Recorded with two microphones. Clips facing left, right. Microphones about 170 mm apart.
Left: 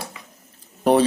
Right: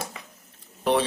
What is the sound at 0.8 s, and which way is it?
Speech, 40° left (ahead or behind).